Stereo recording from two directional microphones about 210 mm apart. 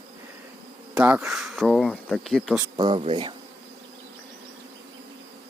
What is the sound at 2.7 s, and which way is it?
Speech, 20° right (ahead or behind).